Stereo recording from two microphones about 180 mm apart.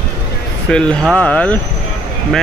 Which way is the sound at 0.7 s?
5° left (ahead or behind).